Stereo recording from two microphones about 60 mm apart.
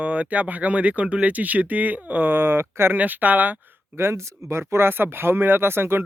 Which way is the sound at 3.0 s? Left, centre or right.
Right.